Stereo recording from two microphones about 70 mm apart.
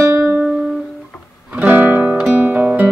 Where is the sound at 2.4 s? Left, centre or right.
Right.